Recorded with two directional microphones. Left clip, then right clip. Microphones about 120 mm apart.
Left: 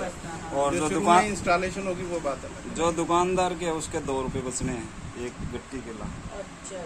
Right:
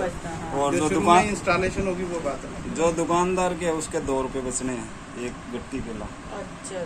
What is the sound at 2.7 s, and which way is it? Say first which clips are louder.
Speech: right 2 dB; 45° left (ahead or behind).